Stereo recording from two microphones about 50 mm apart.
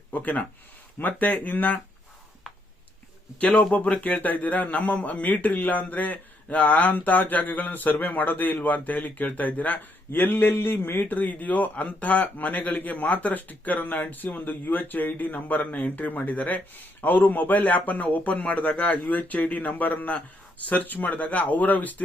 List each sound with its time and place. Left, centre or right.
0.1 s speech: left
3.7 s speech: left